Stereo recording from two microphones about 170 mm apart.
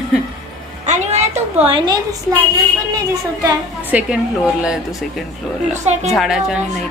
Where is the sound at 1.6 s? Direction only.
30° right (ahead or behind).